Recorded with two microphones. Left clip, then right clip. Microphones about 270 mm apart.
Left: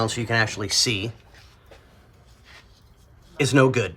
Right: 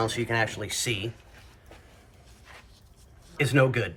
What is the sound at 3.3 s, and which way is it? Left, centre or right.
Speech, centre.